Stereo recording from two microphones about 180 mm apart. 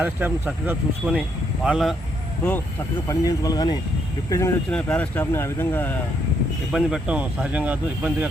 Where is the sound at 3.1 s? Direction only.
20° left (ahead or behind).